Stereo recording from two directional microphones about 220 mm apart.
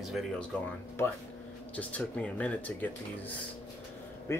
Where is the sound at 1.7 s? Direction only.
5° left (ahead or behind).